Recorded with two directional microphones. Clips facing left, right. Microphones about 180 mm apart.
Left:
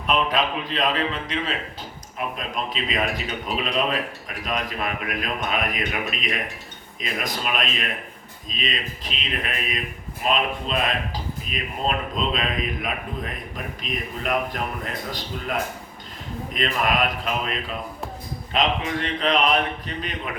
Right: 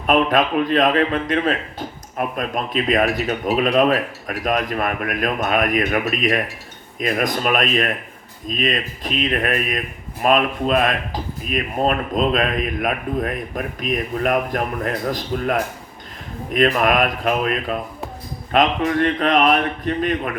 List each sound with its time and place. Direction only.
0.0 s speech: 50° right (ahead or behind)